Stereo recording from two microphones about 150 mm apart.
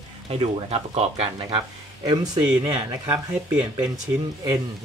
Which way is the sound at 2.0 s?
25° right (ahead or behind).